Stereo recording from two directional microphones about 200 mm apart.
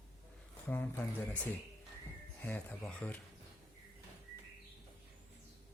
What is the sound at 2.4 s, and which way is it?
Speech, 10° left (ahead or behind).